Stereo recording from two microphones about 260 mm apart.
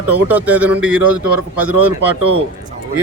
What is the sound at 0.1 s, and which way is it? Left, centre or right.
Speech, centre.